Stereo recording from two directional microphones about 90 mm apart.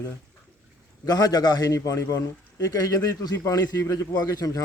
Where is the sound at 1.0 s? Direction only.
45° left (ahead or behind).